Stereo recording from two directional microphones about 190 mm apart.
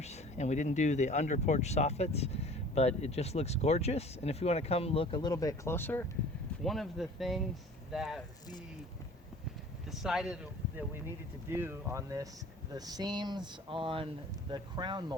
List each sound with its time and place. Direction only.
0.0 s speech: 35° left (ahead or behind); by 8.2 s centre (ahead or behind)
9.9 s speech: centre (ahead or behind)
11.4 s speech: 10° right (ahead or behind)